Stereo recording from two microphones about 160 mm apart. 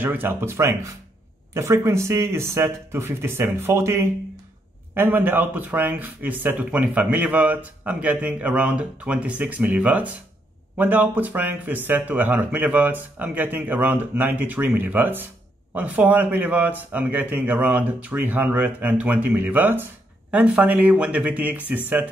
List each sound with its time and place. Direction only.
0.0 s speech: 10° right (ahead or behind)